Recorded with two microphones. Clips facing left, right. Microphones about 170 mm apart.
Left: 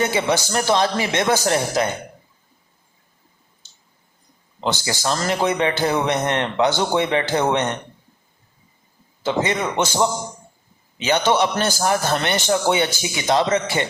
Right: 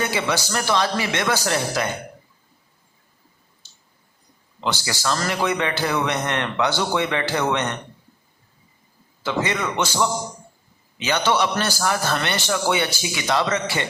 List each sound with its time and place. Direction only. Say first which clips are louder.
0.0 s speech: left 4 dB; 20° left (ahead or behind)
4.6 s speech: left 2 dB; 20° left (ahead or behind)
9.2 s speech: left 3 dB; 20° left (ahead or behind)